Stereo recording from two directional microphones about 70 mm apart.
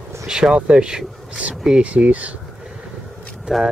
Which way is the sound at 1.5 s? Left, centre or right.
Centre.